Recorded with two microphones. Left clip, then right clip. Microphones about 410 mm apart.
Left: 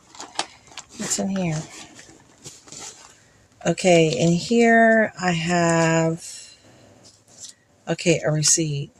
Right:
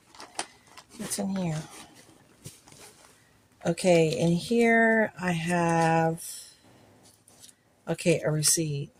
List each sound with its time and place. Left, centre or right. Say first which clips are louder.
0.1 s a sound: left 8 dB; right
3.6 s speech: left 6 dB; right
7.9 s speech: left 5 dB; right